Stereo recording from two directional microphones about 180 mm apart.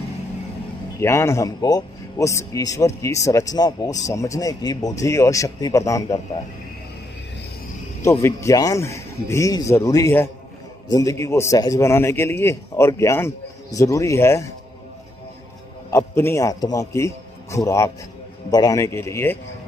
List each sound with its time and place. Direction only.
0.9 s a man's voice: 15° left (ahead or behind)
8.0 s a man's voice: 15° left (ahead or behind)
15.9 s a man's voice: 15° left (ahead or behind)